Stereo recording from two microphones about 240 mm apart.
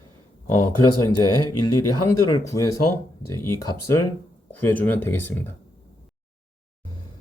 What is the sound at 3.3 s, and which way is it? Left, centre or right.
Speech, left.